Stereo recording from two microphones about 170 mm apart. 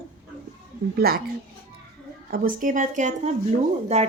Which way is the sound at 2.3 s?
55° right (ahead or behind).